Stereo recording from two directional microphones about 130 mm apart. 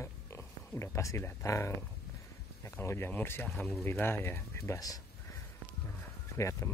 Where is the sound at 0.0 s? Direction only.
20° left (ahead or behind).